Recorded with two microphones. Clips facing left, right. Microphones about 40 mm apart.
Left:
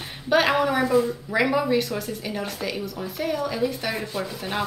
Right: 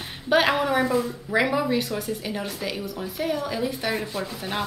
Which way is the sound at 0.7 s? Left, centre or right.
Right.